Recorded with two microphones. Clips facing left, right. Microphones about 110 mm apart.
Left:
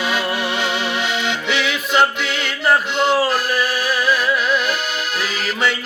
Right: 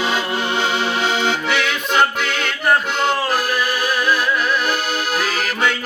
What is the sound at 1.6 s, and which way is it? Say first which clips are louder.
Music: left 3 dB; centre (ahead or behind).